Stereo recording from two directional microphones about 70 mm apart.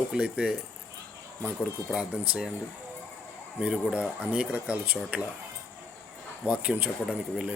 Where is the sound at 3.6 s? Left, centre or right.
Centre.